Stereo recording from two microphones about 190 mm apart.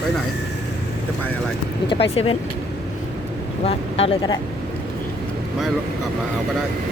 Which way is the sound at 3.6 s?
30° left (ahead or behind).